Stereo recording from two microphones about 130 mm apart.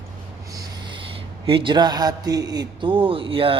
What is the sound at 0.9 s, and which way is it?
A man's voice, 40° right (ahead or behind).